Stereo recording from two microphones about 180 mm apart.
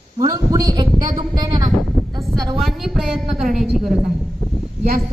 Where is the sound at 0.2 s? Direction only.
20° right (ahead or behind).